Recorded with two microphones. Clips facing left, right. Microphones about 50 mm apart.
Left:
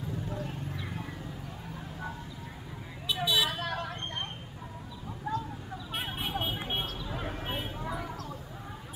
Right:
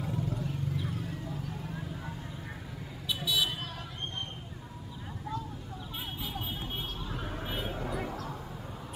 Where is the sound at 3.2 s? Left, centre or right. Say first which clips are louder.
Left 3 dB; left.